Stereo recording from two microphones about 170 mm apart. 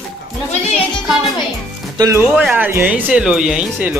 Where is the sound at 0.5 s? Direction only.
40° left (ahead or behind).